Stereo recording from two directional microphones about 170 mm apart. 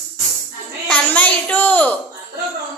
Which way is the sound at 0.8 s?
10° left (ahead or behind).